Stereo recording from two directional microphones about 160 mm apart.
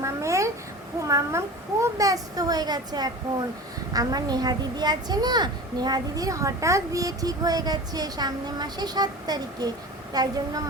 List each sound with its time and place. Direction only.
0.0 s babbling: 20° right (ahead or behind)
1.0 s a child's voice: 20° right (ahead or behind)